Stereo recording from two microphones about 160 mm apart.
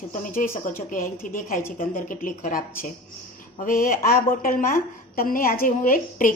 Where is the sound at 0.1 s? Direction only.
60° left (ahead or behind).